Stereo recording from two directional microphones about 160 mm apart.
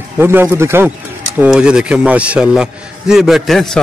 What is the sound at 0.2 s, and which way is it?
Speech, 15° right (ahead or behind).